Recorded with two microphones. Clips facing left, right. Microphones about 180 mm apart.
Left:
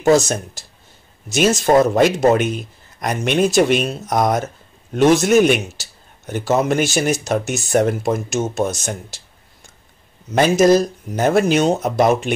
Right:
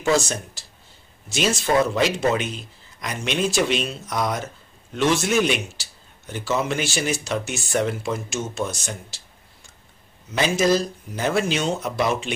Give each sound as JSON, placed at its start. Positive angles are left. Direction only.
{"t": 0.0, "sound": "a man's voice", "side_deg": 45}